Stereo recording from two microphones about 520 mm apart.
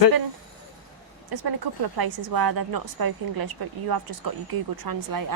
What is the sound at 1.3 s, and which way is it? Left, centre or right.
A woman's voice, right.